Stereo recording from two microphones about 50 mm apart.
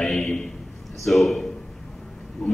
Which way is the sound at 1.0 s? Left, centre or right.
Centre.